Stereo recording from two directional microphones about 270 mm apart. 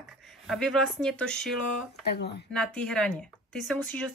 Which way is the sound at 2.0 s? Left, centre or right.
Left.